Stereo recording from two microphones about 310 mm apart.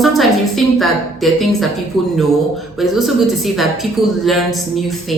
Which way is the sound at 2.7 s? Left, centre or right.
Centre.